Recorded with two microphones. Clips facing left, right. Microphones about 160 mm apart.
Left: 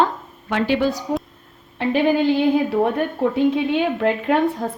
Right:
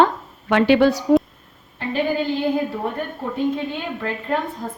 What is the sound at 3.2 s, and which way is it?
A woman's voice, 80° left.